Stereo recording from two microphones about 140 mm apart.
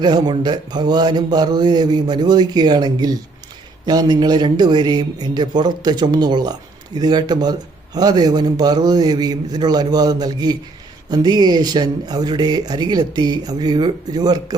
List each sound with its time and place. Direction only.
0.0 s speech: 30° right (ahead or behind)